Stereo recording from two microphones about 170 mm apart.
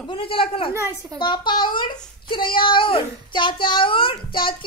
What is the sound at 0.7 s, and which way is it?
Speech, 20° right (ahead or behind).